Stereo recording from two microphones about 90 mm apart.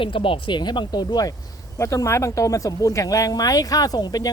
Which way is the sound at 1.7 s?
35° left (ahead or behind).